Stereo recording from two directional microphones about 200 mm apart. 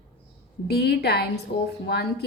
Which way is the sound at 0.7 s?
55° left (ahead or behind).